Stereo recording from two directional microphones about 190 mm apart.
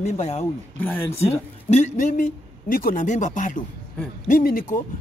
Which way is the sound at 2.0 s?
40° left (ahead or behind).